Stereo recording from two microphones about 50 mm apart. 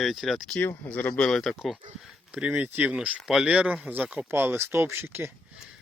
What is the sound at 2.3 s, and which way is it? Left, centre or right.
Speech, right.